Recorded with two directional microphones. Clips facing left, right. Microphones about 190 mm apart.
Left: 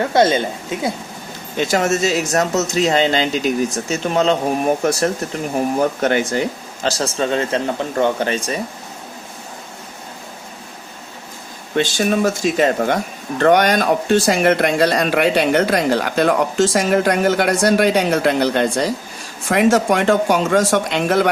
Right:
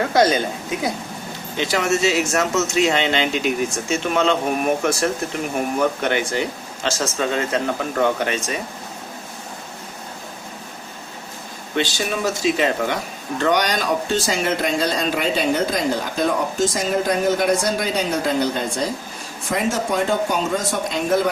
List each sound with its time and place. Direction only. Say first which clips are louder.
0.1 s speech: left 2 dB; 25° left (ahead or behind)
1.5 s speech: left 3 dB; 45° left (ahead or behind)
11.8 s speech: left 6 dB; 50° left (ahead or behind); by 21.2 s 75° left (ahead or behind)